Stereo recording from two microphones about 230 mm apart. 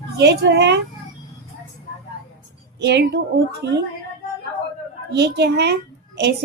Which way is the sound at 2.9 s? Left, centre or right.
Right.